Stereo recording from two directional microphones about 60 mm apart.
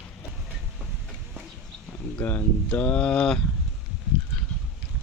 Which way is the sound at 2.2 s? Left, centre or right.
Left.